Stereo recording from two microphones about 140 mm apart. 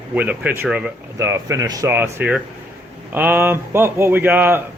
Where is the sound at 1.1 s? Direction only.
20° right (ahead or behind).